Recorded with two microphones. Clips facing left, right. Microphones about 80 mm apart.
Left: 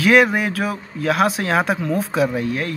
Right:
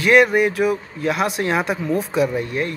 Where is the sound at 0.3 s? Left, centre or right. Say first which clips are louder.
Right 4 dB; left.